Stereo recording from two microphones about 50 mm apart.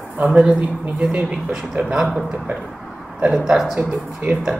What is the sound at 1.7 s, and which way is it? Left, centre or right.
Speech, centre.